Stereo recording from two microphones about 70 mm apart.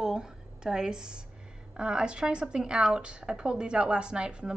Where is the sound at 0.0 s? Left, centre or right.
Centre.